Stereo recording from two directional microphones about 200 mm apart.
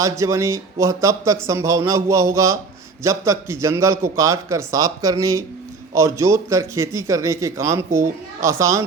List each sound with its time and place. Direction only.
0.0 s speech: 15° right (ahead or behind)